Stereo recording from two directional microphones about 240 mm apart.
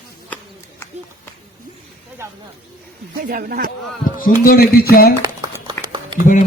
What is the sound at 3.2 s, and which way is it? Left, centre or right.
Speech, right.